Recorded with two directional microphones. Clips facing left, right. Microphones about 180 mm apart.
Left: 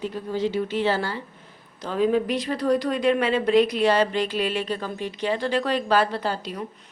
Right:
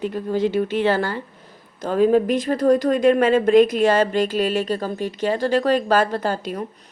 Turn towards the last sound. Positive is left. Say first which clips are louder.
# right 4 dB
turn(degrees=-45)  # may be behind; listen again after turning